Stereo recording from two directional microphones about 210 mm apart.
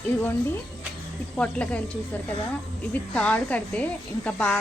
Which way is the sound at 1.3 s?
5° left (ahead or behind).